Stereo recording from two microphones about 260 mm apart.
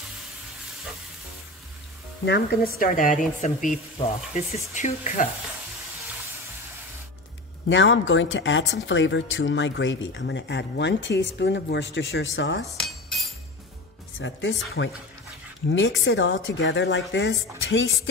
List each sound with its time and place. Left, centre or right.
2.2 s a woman's voice: left
4.0 s frying: left
7.7 s speech: left
12.6 s cutlery: centre
14.1 s a woman's voice: left
16.0 s speech: left